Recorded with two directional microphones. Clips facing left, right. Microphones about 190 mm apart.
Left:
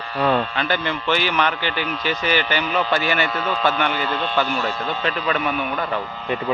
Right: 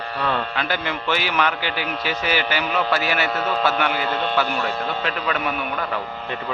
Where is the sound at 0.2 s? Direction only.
20° left (ahead or behind).